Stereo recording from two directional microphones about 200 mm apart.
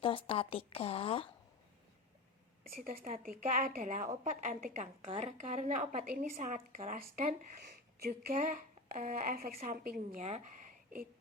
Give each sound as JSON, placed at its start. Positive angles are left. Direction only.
{"t": 0.0, "sound": "a woman's voice", "side_deg": 25}
{"t": 2.6, "sound": "a woman's voice", "side_deg": -45}